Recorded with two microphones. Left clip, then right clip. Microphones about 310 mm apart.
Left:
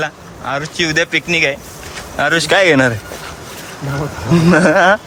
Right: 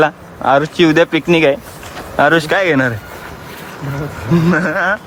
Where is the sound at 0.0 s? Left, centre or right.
Centre.